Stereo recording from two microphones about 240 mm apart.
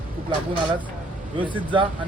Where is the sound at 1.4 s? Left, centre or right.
Centre.